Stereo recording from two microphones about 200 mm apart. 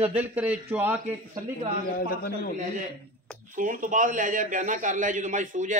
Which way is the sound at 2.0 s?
45° left (ahead or behind).